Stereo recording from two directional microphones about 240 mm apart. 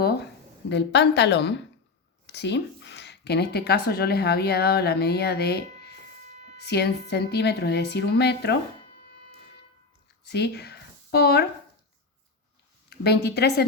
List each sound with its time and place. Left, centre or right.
0.0 s a sound: left
0.7 s a woman's voice: left
10.2 s a woman's voice: left
12.9 s a woman's voice: left